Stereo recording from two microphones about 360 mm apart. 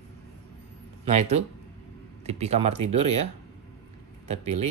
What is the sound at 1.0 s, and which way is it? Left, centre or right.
Speech, centre.